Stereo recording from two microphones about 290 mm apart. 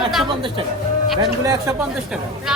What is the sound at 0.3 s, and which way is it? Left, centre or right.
Speech, centre.